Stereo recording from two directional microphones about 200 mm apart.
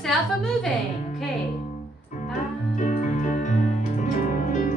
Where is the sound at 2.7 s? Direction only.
40° left (ahead or behind).